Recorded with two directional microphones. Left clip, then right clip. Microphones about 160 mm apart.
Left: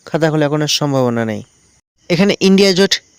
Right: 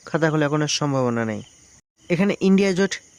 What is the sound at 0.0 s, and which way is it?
Speech, 30° left (ahead or behind).